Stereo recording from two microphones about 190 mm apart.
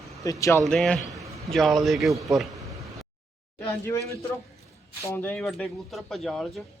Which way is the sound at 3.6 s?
15° left (ahead or behind).